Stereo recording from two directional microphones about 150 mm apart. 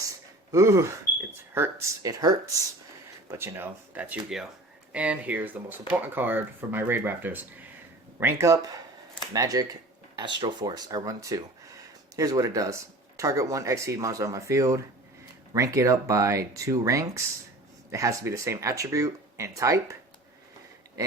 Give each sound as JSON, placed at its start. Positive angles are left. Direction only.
{"t": 0.5, "sound": "speech", "side_deg": -20}